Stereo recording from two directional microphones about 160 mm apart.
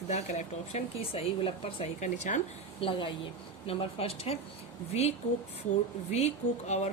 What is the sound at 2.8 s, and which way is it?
A woman's voice, 30° left (ahead or behind).